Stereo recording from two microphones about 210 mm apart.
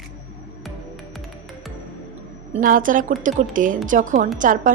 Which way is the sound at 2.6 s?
40° right (ahead or behind).